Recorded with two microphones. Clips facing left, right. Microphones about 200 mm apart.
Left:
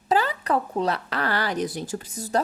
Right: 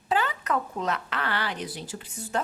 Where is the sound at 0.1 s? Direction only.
35° left (ahead or behind).